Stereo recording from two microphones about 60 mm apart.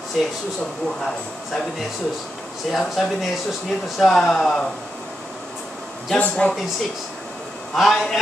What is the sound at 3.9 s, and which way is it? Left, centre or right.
Speech, centre.